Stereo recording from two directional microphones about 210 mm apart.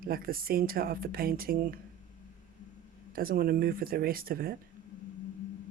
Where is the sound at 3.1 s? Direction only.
45° right (ahead or behind).